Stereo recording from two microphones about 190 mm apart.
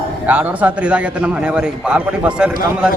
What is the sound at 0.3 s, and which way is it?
A man's voice, 10° right (ahead or behind).